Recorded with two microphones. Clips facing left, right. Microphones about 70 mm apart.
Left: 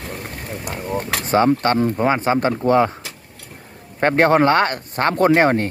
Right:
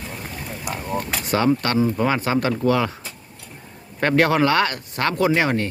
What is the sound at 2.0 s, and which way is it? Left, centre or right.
Speech, left.